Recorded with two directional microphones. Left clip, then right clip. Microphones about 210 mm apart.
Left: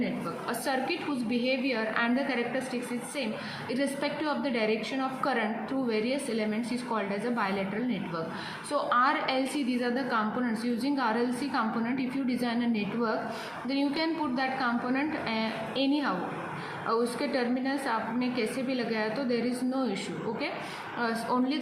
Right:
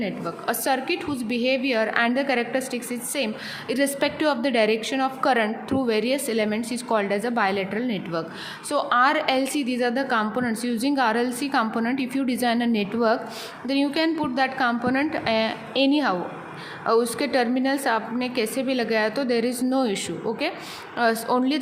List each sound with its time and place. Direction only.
0.0 s a woman's voice: 50° right (ahead or behind)
3.7 s a woman's voice: 50° right (ahead or behind)
21.0 s a woman's voice: 50° right (ahead or behind)